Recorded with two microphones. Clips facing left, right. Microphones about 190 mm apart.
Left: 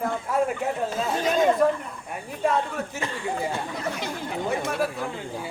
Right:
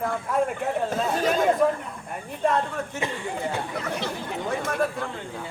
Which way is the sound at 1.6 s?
Centre (ahead or behind).